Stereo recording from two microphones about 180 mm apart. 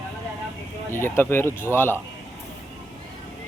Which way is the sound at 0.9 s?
10° left (ahead or behind).